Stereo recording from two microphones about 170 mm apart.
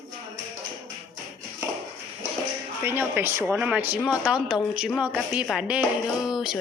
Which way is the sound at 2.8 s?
10° right (ahead or behind).